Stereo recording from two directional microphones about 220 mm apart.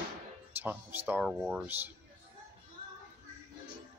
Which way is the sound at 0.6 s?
10° right (ahead or behind).